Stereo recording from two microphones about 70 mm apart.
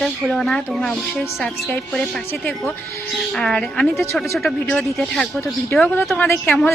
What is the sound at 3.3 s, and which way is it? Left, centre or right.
A woman's voice, centre.